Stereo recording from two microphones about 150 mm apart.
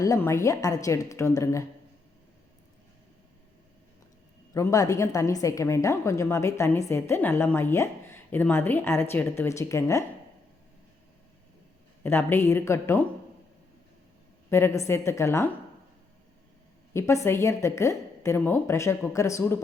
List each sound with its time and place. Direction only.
0.0 s a woman's voice: 20° left (ahead or behind)
4.5 s a woman's voice: 20° left (ahead or behind)
12.0 s a woman's voice: 15° left (ahead or behind)
14.5 s a woman's voice: 20° left (ahead or behind)
16.9 s a woman's voice: 20° left (ahead or behind)